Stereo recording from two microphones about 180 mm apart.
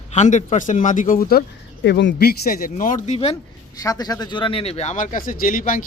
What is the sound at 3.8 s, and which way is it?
Speech, 20° left (ahead or behind).